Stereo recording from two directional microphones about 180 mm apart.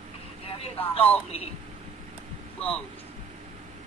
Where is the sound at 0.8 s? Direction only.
30° left (ahead or behind).